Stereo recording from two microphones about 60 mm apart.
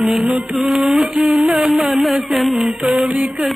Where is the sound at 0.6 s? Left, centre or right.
Centre.